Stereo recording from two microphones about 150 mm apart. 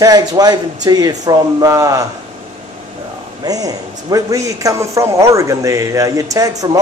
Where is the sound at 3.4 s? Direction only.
25° right (ahead or behind).